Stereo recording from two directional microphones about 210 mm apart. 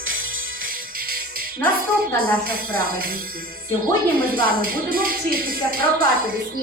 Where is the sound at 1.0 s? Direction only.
45° right (ahead or behind).